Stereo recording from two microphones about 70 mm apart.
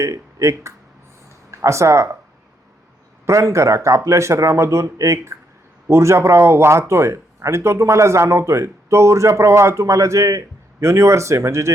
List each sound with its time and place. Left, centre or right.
0.0 s speech: right
3.2 s speech: right